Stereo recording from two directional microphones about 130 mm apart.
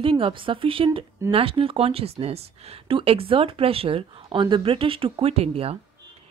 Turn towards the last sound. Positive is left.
turn(degrees=-50)  # may be behind; listen again after turning